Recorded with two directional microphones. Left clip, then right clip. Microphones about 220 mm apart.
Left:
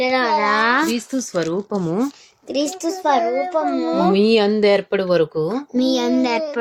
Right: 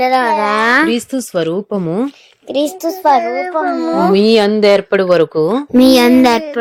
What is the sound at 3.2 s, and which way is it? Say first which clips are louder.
Speech: right 2 dB; 25° right (ahead or behind).